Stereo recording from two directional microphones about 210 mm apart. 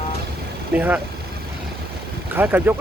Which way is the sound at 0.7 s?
5° right (ahead or behind).